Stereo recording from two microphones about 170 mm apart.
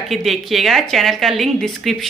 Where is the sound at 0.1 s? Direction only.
Centre (ahead or behind).